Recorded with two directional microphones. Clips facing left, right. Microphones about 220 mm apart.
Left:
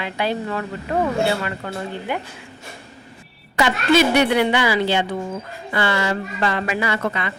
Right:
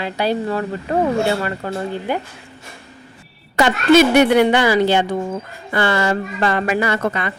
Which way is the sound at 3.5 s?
50° right (ahead or behind).